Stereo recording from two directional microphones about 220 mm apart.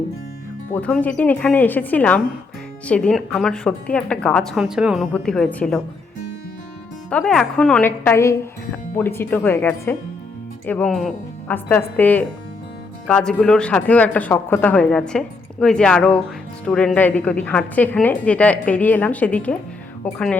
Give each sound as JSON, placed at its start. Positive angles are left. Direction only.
{"t": 0.7, "sound": "a woman's voice", "side_deg": 5}
{"t": 7.1, "sound": "a woman's voice", "side_deg": 5}